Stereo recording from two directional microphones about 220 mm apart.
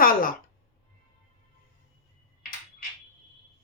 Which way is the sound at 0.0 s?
40° left (ahead or behind).